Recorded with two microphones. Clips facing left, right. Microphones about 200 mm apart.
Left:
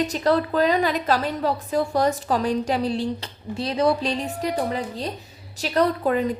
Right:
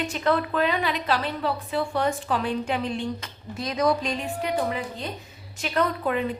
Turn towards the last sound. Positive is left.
turn(degrees=40)  # may be behind; listen again after turning